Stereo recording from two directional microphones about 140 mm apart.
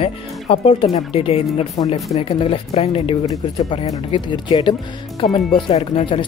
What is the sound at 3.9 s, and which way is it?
Speech, 30° left (ahead or behind).